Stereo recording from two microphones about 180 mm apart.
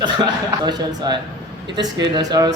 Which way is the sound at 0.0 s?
25° right (ahead or behind).